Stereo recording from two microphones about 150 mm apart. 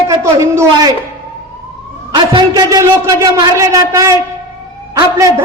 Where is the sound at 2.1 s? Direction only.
30° right (ahead or behind).